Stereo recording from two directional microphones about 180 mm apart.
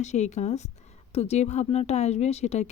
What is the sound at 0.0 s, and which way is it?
Speech, 40° left (ahead or behind).